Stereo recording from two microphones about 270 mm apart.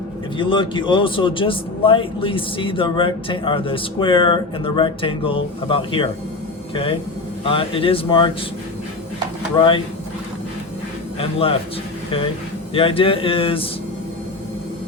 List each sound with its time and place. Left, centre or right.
0.3 s a man's voice: centre
7.4 s a man's voice: centre
9.6 s speech: centre
11.2 s a man's voice: centre
12.7 s a man's voice: centre